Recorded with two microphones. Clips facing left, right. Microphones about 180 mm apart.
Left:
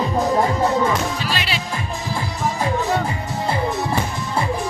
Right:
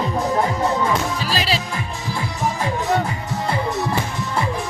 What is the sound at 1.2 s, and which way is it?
Music, 35° right (ahead or behind).